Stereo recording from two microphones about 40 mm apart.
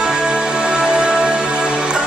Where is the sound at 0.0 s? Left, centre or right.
Right.